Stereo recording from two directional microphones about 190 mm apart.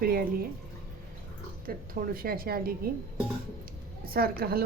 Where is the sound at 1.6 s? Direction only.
50° right (ahead or behind).